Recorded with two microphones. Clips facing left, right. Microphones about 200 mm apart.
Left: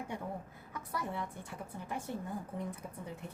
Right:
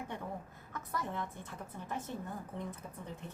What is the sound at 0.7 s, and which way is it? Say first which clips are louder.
A woman's voice: even; 10° left (ahead or behind).